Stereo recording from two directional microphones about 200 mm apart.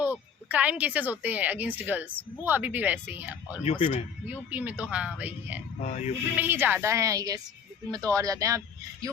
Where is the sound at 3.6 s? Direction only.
30° left (ahead or behind).